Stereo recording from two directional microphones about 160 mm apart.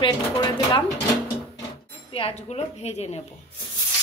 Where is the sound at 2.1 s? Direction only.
40° left (ahead or behind).